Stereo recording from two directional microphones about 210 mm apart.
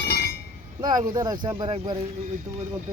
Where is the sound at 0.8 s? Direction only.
20° right (ahead or behind).